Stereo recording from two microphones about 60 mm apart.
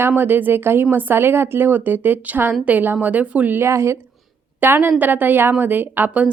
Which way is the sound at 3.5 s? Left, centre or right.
Right.